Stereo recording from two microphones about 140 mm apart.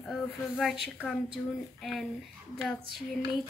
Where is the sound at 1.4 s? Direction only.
5° left (ahead or behind).